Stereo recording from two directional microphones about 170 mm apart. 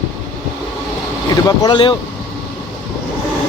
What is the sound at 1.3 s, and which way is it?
Speech, 25° left (ahead or behind).